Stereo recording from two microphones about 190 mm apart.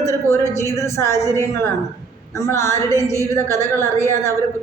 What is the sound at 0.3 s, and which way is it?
Speech, 15° left (ahead or behind).